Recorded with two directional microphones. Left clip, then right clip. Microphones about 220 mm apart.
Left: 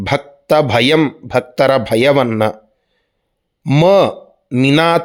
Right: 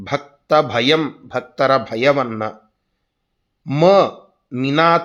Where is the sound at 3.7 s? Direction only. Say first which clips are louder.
Left 2 dB; 45° left (ahead or behind).